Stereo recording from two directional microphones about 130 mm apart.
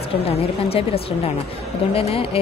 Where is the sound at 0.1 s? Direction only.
50° left (ahead or behind).